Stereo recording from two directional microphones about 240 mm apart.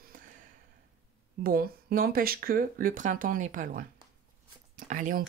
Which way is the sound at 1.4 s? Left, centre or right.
Right.